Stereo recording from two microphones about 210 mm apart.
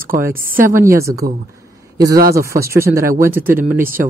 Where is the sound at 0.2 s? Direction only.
10° right (ahead or behind).